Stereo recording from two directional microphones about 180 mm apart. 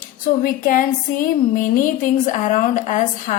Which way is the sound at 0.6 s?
45° left (ahead or behind).